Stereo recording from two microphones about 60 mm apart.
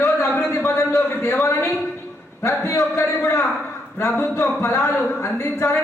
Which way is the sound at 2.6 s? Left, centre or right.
Left.